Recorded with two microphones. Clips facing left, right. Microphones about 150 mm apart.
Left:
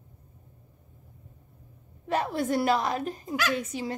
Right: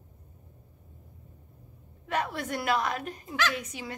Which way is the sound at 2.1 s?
35° left (ahead or behind).